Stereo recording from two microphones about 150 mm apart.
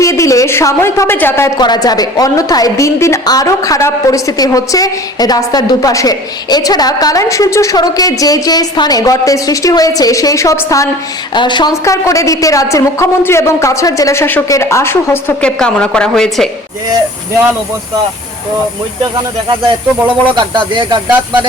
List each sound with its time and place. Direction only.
0.0 s a woman's voice: 20° left (ahead or behind)
1.5 s a woman's voice: 25° left (ahead or behind)
11.3 s a woman's voice: 30° left (ahead or behind); by 16.5 s 5° left (ahead or behind)
19.1 s speech: 30° right (ahead or behind)